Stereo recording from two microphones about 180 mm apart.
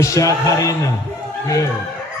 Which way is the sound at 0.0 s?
20° left (ahead or behind).